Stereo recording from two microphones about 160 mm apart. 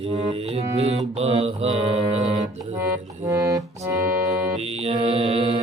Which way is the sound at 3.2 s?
20° right (ahead or behind).